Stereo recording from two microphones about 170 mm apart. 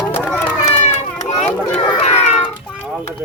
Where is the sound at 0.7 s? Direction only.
40° left (ahead or behind).